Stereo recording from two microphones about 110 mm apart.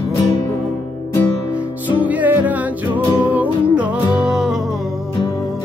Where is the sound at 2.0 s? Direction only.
15° right (ahead or behind).